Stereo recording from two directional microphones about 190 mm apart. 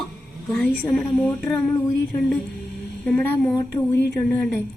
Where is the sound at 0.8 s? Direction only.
5° left (ahead or behind).